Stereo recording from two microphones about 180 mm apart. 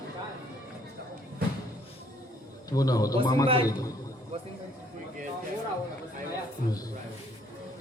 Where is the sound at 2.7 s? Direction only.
20° left (ahead or behind).